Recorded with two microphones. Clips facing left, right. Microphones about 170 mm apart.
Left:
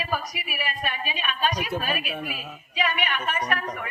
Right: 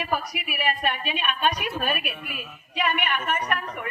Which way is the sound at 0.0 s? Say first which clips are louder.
Right 2 dB; 60° right (ahead or behind).